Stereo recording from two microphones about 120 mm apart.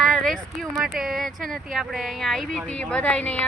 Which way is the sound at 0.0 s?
Centre (ahead or behind).